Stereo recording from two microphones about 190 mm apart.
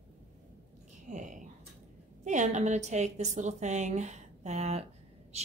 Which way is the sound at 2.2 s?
40° right (ahead or behind).